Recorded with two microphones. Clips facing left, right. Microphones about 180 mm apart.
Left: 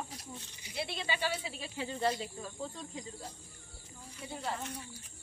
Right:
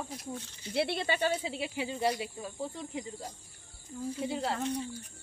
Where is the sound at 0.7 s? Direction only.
65° right (ahead or behind).